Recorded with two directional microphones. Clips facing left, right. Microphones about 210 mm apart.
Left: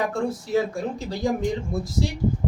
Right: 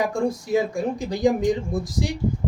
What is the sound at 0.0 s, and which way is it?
Speech, 15° right (ahead or behind).